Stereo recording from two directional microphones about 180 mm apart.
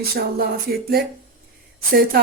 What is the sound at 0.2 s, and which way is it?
Speech, 55° right (ahead or behind).